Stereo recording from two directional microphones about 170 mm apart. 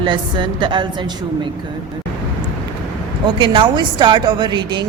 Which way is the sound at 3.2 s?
30° right (ahead or behind).